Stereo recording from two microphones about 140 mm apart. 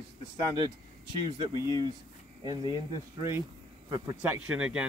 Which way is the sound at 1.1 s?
35° right (ahead or behind).